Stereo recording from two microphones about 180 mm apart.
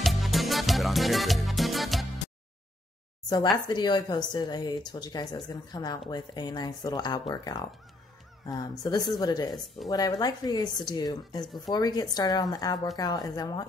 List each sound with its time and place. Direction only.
0.0 s music: centre (ahead or behind)
3.6 s speech: 25° left (ahead or behind)